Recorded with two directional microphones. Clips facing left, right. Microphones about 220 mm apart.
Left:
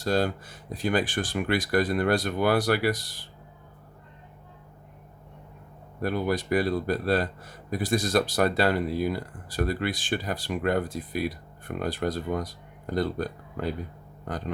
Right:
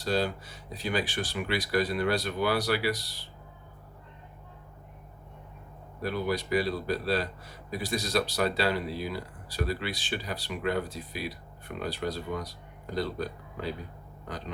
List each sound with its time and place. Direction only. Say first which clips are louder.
0.0 s a man's voice: left 3 dB; 50° left (ahead or behind)
6.0 s a man's voice: left 3 dB; 50° left (ahead or behind)